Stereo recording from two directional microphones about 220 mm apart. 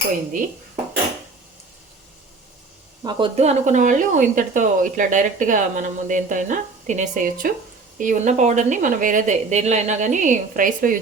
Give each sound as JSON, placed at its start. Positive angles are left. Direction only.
{"t": 3.0, "sound": "speech", "side_deg": -20}